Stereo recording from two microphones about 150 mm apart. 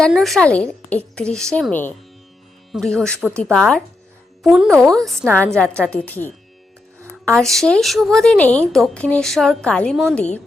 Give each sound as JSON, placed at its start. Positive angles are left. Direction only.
{"t": 0.0, "sound": "a woman's voice", "side_deg": 0}
{"t": 7.3, "sound": "a woman's voice", "side_deg": 5}